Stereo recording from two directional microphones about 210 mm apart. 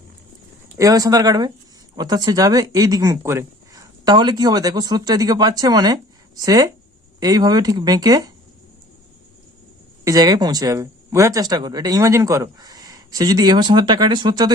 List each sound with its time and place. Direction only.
0.8 s speech: 15° right (ahead or behind)
10.0 s speech: 15° right (ahead or behind)